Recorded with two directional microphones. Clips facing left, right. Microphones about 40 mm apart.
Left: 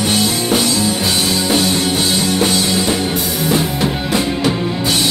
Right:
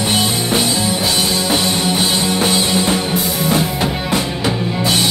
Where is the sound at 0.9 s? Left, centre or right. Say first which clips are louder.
Even; centre.